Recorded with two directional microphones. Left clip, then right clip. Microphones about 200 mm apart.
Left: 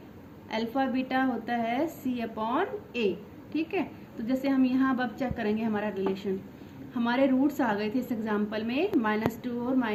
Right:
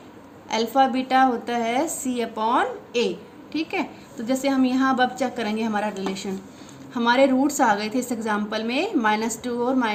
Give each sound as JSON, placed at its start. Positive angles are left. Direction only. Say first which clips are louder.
{"t": 0.4, "sound": "a woman's voice", "louder": "right 10 dB", "side_deg": -50}